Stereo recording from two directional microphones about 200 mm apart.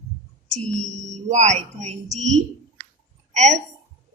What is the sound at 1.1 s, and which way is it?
Speech, 35° right (ahead or behind).